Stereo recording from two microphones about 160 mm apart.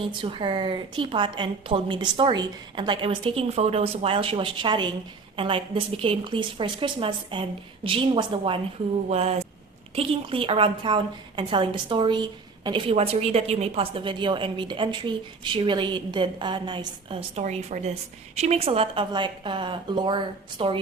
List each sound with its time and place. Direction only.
0.2 s a woman's voice: 30° right (ahead or behind)